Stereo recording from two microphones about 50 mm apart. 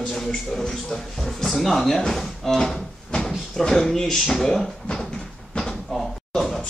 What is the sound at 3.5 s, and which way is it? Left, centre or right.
Speech, centre.